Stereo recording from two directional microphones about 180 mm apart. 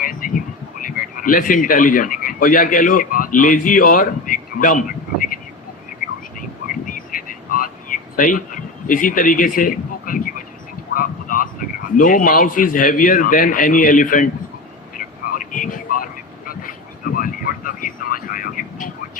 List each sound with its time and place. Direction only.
0.0 s speech: 50° left (ahead or behind)
6.8 s a sound: 50° left (ahead or behind)
11.9 s a man's voice: 50° left (ahead or behind)
14.9 s vehicle: 50° left (ahead or behind)
17.2 s vehicle: 50° left (ahead or behind)